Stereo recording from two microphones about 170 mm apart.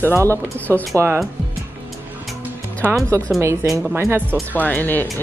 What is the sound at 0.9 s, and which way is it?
Speech, 15° right (ahead or behind).